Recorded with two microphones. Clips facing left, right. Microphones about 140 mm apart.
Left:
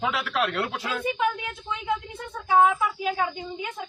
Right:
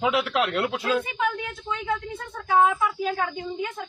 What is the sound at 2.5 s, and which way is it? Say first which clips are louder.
Speech: even; 10° left (ahead or behind).